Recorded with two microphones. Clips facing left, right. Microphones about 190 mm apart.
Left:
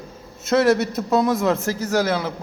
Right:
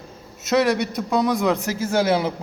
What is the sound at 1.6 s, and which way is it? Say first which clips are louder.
Speech: even; 25° right (ahead or behind).